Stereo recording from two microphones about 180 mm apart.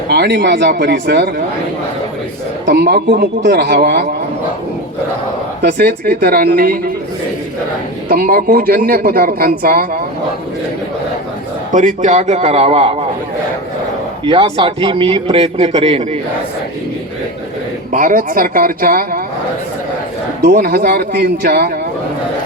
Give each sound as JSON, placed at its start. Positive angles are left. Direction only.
{"t": 0.1, "sound": "speech", "side_deg": -70}
{"t": 2.6, "sound": "a man's voice", "side_deg": -60}
{"t": 5.6, "sound": "a man's voice", "side_deg": -55}
{"t": 8.1, "sound": "speech", "side_deg": -55}
{"t": 11.7, "sound": "a man's voice", "side_deg": -45}
{"t": 14.3, "sound": "a man's voice", "side_deg": -30}
{"t": 17.9, "sound": "speech", "side_deg": -50}
{"t": 20.4, "sound": "a man's voice", "side_deg": -60}